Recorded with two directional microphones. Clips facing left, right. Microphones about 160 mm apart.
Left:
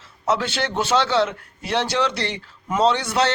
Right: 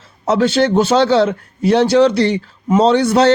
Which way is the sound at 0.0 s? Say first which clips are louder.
Right 8 dB; 40° right (ahead or behind).